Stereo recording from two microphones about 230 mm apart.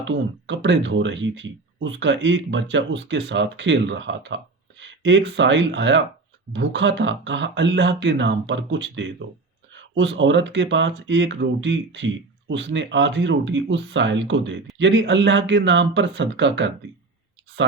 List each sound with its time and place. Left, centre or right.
0.0 s speech: right